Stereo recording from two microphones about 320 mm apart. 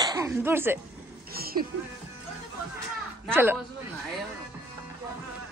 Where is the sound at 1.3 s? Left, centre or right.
Right.